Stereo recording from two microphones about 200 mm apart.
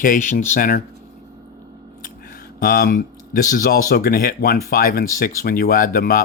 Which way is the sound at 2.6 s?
50° left (ahead or behind).